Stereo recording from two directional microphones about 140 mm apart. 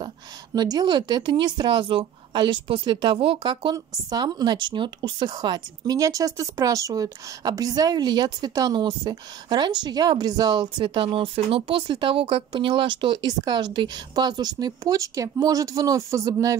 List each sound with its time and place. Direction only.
0.6 s speech: 30° right (ahead or behind)
3.7 s speech: 25° right (ahead or behind)